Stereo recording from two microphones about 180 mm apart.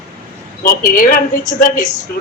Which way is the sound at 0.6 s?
50° left (ahead or behind).